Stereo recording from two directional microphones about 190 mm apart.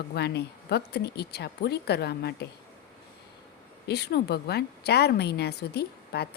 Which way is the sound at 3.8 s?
60° left (ahead or behind).